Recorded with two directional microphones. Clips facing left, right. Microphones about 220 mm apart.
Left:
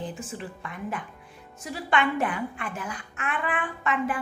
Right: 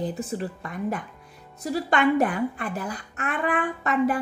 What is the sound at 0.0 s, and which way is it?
A woman's voice, 40° right (ahead or behind).